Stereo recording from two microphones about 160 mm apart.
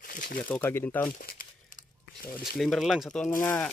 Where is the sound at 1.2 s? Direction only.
60° left (ahead or behind).